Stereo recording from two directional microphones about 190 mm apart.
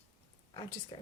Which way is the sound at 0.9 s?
30° left (ahead or behind).